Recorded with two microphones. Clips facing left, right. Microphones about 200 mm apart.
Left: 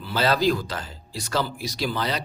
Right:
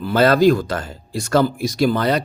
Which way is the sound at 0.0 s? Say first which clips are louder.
Right 8 dB; 50° right (ahead or behind).